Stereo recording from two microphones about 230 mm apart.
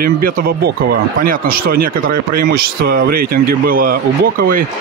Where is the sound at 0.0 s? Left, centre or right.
Right.